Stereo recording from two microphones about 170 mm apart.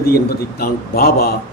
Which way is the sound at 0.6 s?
65° left (ahead or behind).